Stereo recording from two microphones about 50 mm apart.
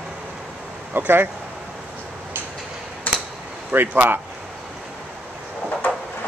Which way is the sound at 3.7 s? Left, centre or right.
Right.